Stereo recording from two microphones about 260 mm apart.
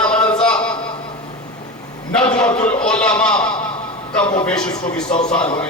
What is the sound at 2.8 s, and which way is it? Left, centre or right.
Speech, centre.